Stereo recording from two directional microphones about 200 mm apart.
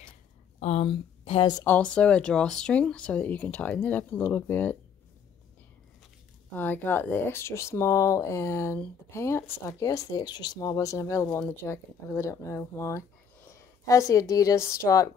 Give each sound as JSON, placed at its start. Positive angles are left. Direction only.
{"t": 0.6, "sound": "speech", "side_deg": 35}
{"t": 1.6, "sound": "speech", "side_deg": 10}
{"t": 6.5, "sound": "a woman's voice", "side_deg": 10}